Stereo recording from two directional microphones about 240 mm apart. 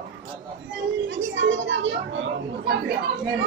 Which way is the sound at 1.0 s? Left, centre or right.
Right.